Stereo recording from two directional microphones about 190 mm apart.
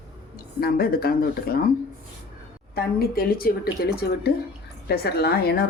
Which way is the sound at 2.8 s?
55° left (ahead or behind).